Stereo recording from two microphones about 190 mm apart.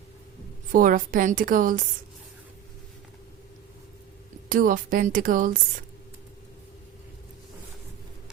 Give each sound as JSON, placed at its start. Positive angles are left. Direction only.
{"t": 0.7, "sound": "a woman's voice", "side_deg": -45}
{"t": 4.4, "sound": "a woman's voice", "side_deg": -45}